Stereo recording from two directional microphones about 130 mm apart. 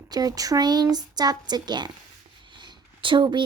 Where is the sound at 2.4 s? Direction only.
35° right (ahead or behind).